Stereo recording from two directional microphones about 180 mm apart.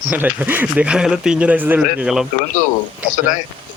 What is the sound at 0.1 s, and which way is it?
Speech, 10° right (ahead or behind).